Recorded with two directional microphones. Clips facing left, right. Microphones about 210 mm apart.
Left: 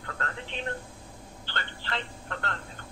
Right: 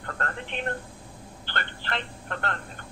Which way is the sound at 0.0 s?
55° right (ahead or behind).